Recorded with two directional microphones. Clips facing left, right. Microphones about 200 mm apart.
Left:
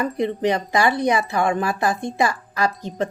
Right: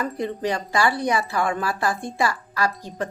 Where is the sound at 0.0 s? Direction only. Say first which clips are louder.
Left 4 dB; 20° left (ahead or behind).